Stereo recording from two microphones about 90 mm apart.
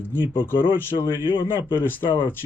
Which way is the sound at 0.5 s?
60° left (ahead or behind).